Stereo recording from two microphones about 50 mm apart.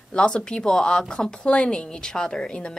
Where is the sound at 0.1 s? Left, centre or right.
Centre.